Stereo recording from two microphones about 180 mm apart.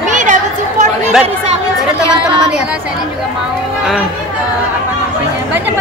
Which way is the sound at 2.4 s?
5° right (ahead or behind).